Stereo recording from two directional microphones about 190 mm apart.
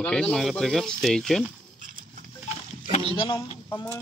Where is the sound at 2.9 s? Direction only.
30° left (ahead or behind).